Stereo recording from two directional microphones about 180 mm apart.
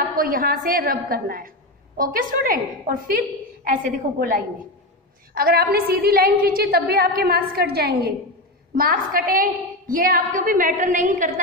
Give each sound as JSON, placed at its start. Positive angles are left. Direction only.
{"t": 0.2, "sound": "a woman's voice", "side_deg": -55}